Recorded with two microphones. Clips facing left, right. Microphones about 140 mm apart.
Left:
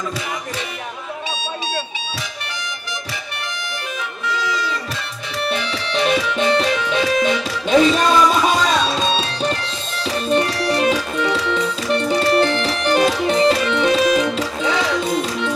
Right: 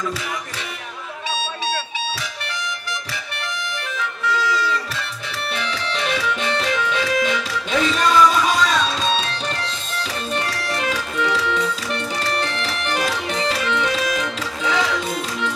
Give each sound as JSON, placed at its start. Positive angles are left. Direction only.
{"t": 4.3, "sound": "music", "side_deg": 20}